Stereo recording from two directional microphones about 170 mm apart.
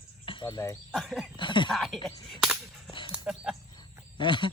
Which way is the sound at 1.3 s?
30° left (ahead or behind).